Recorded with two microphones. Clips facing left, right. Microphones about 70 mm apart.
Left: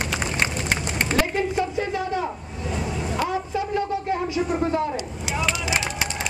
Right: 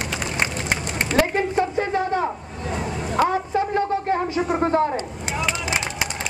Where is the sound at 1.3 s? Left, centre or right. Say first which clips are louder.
Right 2 dB; right.